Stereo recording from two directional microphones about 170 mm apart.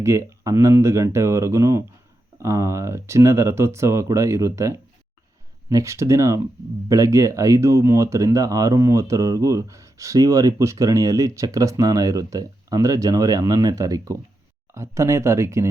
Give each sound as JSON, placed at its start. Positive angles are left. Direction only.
{"t": 0.0, "sound": "speech", "side_deg": -15}